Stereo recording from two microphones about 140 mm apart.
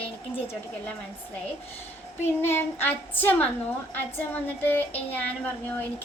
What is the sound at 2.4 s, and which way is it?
Child singing, 15° left (ahead or behind).